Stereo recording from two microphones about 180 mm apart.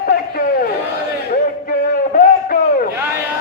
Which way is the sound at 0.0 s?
60° left (ahead or behind).